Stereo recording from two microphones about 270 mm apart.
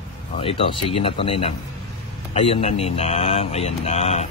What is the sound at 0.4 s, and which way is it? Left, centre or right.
Speech, centre.